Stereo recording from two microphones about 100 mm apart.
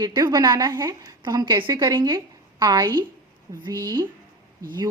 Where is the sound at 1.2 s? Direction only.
45° right (ahead or behind).